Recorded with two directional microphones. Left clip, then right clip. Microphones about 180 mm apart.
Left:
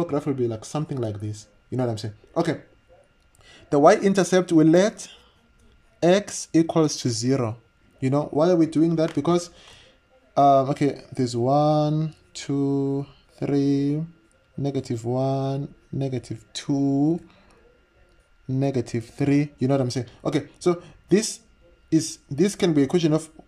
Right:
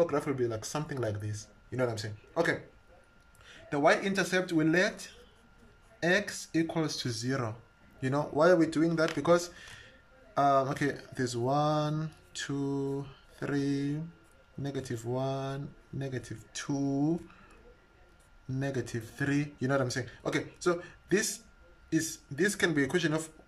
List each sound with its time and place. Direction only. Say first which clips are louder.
0.0 s speech: left 4 dB; 20° left (ahead or behind)
18.5 s speech: left 10 dB; 25° left (ahead or behind)